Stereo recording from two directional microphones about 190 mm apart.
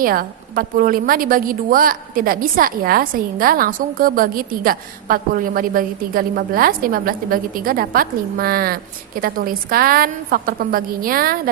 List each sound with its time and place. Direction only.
0.0 s a woman's voice: 50° right (ahead or behind)